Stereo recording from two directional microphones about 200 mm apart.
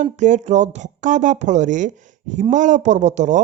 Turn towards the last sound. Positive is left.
turn(degrees=-35)  # may be behind; listen again after turning